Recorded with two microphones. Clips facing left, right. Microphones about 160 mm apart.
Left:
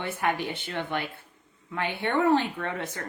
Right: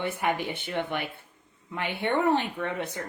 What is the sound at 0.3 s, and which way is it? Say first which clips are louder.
Speech: left 1 dB; 15° right (ahead or behind).